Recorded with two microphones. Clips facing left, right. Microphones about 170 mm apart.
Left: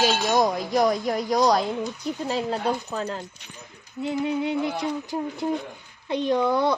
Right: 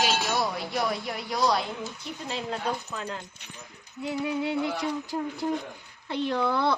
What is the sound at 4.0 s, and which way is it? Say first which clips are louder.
Music: left 4 dB; 25° left (ahead or behind).